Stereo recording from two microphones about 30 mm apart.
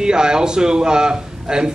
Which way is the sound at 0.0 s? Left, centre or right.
Right.